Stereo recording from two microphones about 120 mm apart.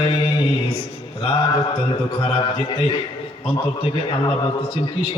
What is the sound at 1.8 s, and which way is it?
A man's voice, 45° left (ahead or behind).